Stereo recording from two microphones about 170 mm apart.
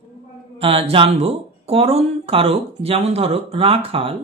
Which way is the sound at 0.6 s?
35° right (ahead or behind).